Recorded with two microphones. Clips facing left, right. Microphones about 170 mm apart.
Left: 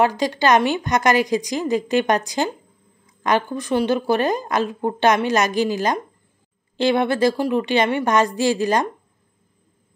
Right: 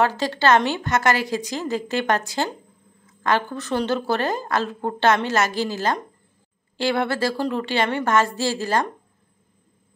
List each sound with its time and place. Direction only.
0.0 s a woman's voice: 15° left (ahead or behind)